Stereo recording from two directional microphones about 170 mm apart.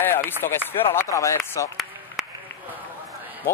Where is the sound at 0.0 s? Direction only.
10° left (ahead or behind).